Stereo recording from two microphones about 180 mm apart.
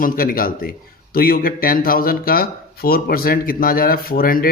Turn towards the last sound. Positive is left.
turn(degrees=55)  # may be behind; listen again after turning